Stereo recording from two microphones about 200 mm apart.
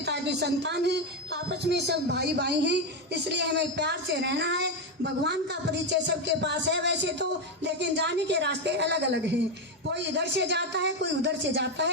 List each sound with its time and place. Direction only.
0.0 s a woman's voice: 60° right (ahead or behind)